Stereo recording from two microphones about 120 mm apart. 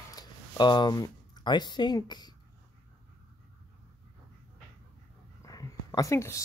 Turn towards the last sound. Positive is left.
turn(degrees=25)  # may be behind; listen again after turning